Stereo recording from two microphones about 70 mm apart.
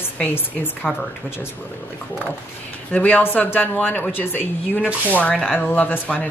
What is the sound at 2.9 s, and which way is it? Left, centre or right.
Speech, left.